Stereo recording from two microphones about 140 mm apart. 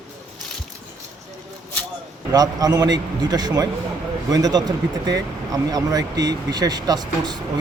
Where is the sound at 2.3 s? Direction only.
25° right (ahead or behind).